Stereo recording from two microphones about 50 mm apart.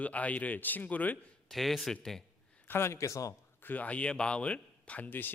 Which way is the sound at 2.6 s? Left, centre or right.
Left.